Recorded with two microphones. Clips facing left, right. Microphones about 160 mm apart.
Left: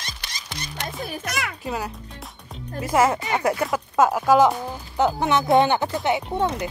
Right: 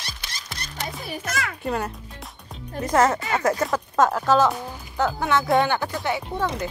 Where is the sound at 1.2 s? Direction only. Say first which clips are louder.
Right 2 dB; 15° left (ahead or behind).